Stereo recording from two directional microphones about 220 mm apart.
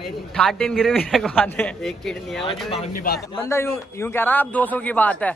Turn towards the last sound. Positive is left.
turn(degrees=5)  # may be behind; listen again after turning